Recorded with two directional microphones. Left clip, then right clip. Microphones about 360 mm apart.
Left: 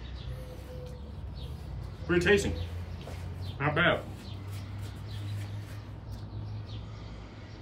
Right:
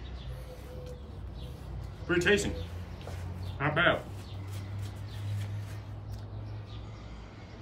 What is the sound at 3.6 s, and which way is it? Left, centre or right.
Speech, centre.